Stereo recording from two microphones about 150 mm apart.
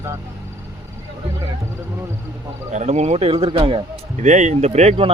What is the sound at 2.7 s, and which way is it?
Speech, 50° right (ahead or behind).